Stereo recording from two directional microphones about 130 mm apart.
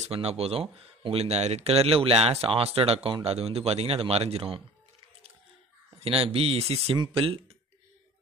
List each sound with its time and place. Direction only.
0.0 s speech: 55° right (ahead or behind)
5.9 s speech: 50° right (ahead or behind)